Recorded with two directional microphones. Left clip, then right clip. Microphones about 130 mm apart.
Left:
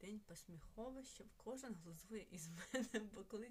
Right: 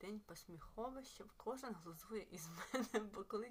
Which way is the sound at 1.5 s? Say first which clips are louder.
Right 5 dB; 50° left (ahead or behind).